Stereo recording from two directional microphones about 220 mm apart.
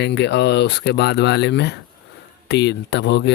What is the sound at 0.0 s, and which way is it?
Speech, 50° left (ahead or behind).